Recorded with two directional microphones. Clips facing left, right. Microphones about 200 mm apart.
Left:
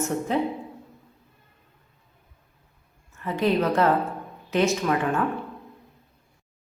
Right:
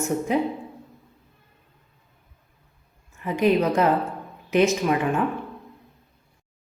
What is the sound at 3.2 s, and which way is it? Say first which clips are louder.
A woman's voice: right 3 dB; 15° right (ahead or behind).